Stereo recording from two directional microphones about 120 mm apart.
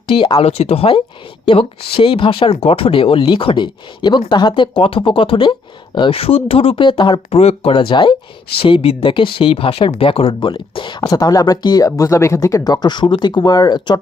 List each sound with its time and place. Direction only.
0.1 s speech: 45° left (ahead or behind)
7.3 s speech: 60° left (ahead or behind)
11.0 s speech: 35° left (ahead or behind)